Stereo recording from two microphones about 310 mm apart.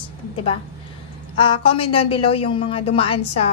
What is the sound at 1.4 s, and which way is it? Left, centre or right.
A woman's voice, centre.